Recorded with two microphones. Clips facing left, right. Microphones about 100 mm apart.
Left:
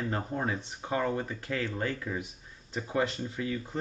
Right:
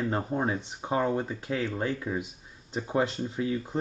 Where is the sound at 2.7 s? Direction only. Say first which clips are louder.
Right 3 dB; 30° right (ahead or behind).